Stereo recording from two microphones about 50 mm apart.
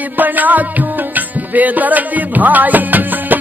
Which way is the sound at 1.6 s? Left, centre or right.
Right.